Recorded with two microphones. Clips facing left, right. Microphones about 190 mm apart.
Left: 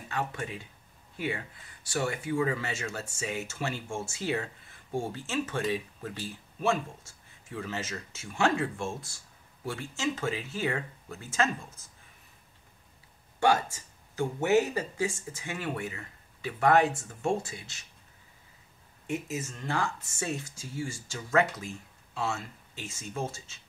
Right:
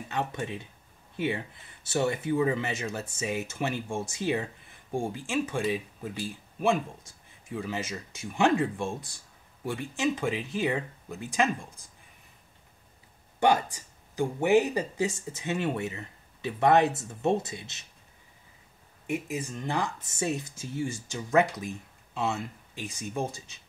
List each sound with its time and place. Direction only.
0.1 s speech: 20° right (ahead or behind)
13.4 s speech: 15° right (ahead or behind)
19.0 s speech: 15° right (ahead or behind)